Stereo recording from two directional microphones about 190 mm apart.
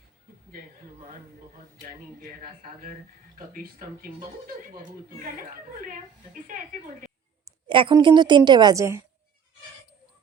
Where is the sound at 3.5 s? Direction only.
45° right (ahead or behind).